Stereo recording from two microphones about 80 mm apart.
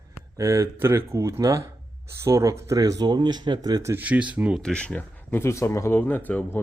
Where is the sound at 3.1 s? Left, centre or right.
Right.